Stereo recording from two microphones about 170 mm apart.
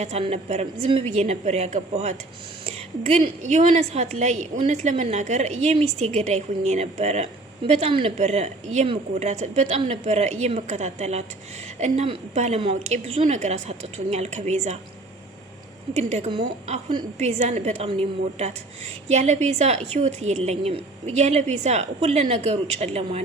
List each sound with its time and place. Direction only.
0.0 s a woman's voice: 40° right (ahead or behind)
16.0 s a woman's voice: 40° right (ahead or behind)